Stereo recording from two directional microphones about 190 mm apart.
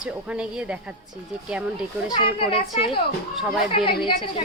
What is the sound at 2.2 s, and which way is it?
A woman's voice, 30° left (ahead or behind).